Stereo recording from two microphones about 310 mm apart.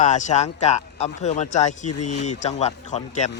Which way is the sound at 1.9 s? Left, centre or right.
Left.